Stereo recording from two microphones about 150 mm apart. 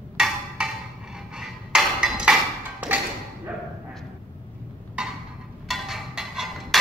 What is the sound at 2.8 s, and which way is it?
Thump, 10° right (ahead or behind).